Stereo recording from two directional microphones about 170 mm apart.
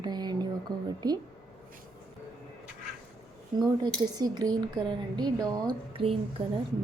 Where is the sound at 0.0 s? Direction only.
25° right (ahead or behind).